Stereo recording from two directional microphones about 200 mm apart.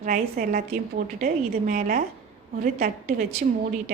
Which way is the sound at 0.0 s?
45° right (ahead or behind).